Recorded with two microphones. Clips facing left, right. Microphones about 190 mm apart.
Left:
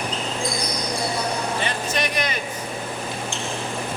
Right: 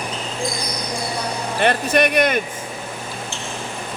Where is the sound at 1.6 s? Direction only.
60° right (ahead or behind).